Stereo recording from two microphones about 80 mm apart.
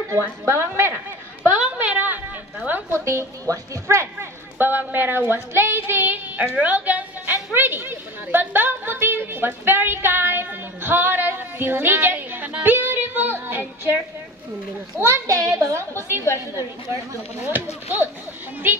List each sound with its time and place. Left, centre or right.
0.1 s a woman's voice: right
1.8 s a sound: right
2.9 s speech: right
15.0 s a woman's voice: right